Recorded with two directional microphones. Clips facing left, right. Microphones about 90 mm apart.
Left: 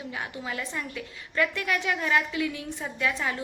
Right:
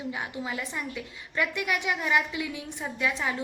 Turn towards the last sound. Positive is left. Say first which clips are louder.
# even
turn(degrees=-15)  # may be behind; listen again after turning